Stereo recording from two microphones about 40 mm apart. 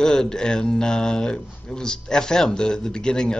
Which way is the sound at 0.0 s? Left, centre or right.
Centre.